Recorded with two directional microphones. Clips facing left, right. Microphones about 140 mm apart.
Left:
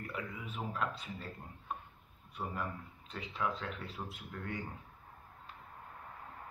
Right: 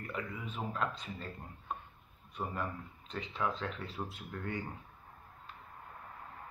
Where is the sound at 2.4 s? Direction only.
15° right (ahead or behind).